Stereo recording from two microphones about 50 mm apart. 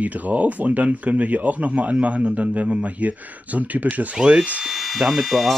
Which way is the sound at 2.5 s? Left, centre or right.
Right.